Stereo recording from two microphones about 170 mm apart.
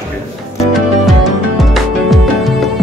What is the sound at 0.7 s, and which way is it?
Music, centre (ahead or behind).